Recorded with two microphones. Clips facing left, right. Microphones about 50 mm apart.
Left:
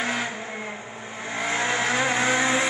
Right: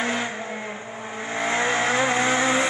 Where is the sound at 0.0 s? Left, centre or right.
Centre.